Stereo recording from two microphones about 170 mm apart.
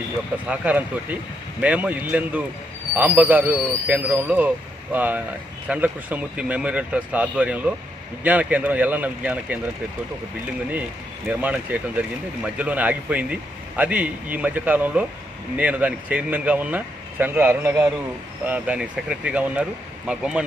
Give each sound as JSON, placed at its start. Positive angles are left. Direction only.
{"t": 0.5, "sound": "a man's voice", "side_deg": -10}
{"t": 10.7, "sound": "a man's voice", "side_deg": -10}